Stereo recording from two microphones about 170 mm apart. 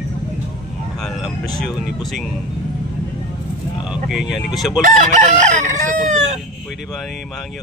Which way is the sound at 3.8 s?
5° right (ahead or behind).